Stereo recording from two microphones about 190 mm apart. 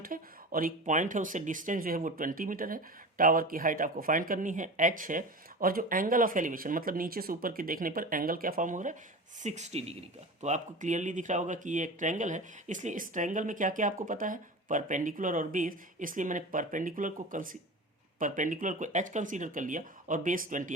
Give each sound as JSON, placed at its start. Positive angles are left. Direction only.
{"t": 0.0, "sound": "speech", "side_deg": -45}